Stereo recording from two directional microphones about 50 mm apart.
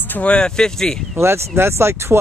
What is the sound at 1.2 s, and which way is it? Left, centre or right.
Speech, right.